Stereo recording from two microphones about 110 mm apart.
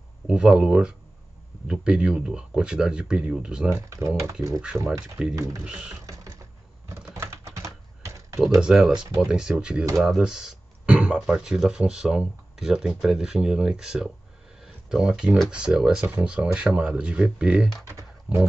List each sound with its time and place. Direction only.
0.3 s speech: 5° right (ahead or behind)
3.7 s speech: 30° right (ahead or behind)
5.3 s speech: 30° right (ahead or behind)
5.6 s speech: 10° right (ahead or behind)
6.0 s a sound: 30° right (ahead or behind)
6.9 s typing: 25° right (ahead or behind)
8.4 s speech: 5° right (ahead or behind)
17.8 s typing: 25° right (ahead or behind)